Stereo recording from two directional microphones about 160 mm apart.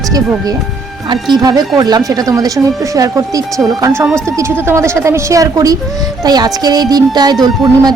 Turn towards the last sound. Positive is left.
turn(degrees=-25)  # may be behind; listen again after turning